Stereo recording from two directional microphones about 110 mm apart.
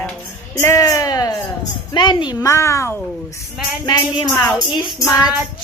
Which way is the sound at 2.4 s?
25° left (ahead or behind).